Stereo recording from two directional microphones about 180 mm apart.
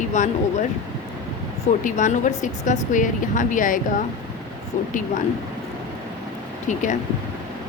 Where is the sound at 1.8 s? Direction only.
45° left (ahead or behind).